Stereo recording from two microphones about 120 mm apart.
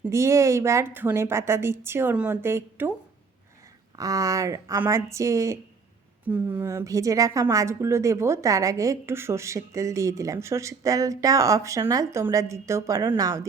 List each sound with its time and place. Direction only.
0.1 s a woman's voice: 25° right (ahead or behind)
3.9 s a woman's voice: 30° right (ahead or behind)
6.2 s a woman's voice: 15° right (ahead or behind)